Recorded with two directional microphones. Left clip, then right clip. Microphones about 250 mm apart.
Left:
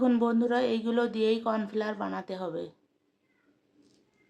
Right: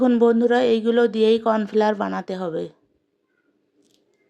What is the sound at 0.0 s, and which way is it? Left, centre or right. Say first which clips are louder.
Speech: right 10 dB; right.